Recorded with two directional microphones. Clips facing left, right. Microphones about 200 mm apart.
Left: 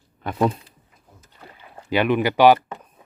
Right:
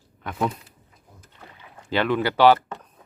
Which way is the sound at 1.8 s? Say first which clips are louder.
Left 3 dB; 15° left (ahead or behind).